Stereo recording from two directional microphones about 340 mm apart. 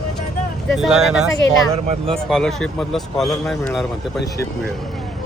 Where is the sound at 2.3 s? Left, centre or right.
Centre.